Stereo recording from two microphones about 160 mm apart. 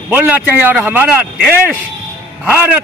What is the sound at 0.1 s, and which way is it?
Speech, 10° right (ahead or behind).